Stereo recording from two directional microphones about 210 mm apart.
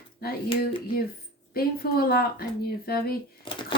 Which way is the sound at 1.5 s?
45° left (ahead or behind).